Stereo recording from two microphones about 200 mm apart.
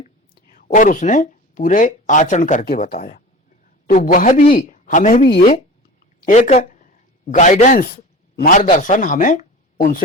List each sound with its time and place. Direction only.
0.0 s a man's voice: 45° left (ahead or behind)